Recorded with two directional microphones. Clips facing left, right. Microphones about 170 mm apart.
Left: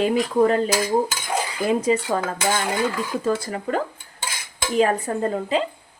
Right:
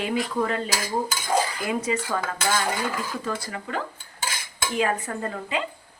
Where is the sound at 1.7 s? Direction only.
30° left (ahead or behind).